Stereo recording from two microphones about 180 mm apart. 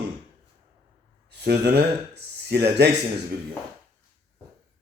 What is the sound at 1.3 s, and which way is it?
Speech, 70° right (ahead or behind).